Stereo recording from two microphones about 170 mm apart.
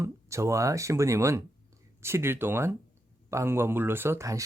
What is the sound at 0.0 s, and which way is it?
Speech, 15° right (ahead or behind).